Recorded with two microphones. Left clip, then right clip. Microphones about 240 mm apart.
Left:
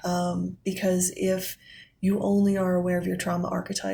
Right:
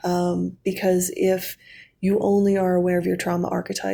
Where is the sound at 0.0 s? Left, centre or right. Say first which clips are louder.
Right 5 dB; right.